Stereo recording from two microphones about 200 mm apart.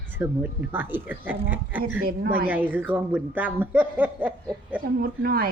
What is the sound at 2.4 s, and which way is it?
Speech, 10° right (ahead or behind).